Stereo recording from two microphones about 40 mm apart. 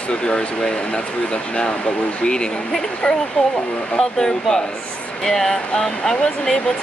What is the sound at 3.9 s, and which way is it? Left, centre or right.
Speech, centre.